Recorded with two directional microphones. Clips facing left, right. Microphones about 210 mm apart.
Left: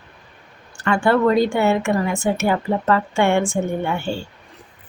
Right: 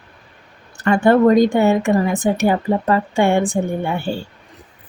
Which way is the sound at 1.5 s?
15° right (ahead or behind).